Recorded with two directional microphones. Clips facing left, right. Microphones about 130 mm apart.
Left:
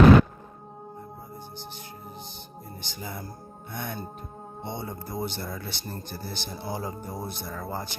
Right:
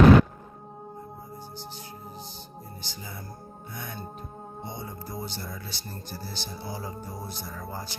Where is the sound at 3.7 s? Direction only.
65° left (ahead or behind).